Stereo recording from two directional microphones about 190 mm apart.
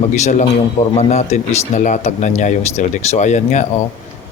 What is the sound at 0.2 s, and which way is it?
Speech, 40° left (ahead or behind).